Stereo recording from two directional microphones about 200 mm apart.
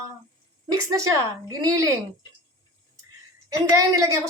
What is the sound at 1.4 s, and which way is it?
Speech, 15° right (ahead or behind).